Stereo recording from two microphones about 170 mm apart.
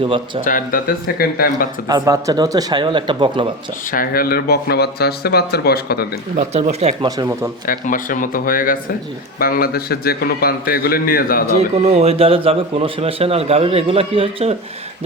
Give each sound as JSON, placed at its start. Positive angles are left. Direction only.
{"t": 0.0, "sound": "a man's voice", "side_deg": -30}
{"t": 0.4, "sound": "a man's voice", "side_deg": 55}
{"t": 1.9, "sound": "speech", "side_deg": -20}
{"t": 3.9, "sound": "speech", "side_deg": 60}
{"t": 6.3, "sound": "a man's voice", "side_deg": -40}
{"t": 7.2, "sound": "speech", "side_deg": -15}
{"t": 7.7, "sound": "a man's voice", "side_deg": 55}
{"t": 11.8, "sound": "a man's voice", "side_deg": -40}